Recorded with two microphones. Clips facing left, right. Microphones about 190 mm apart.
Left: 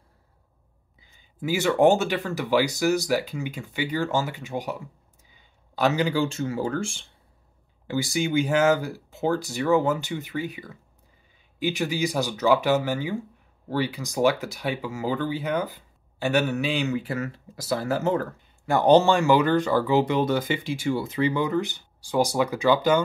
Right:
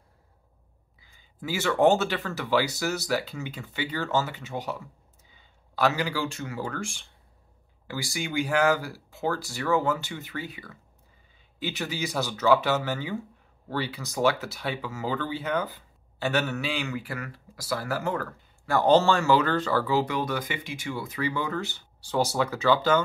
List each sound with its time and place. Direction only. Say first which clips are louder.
1.1 s speech: left 5 dB; 15° left (ahead or behind)